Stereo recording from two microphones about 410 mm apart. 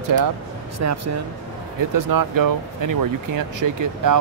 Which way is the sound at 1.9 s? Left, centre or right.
Right.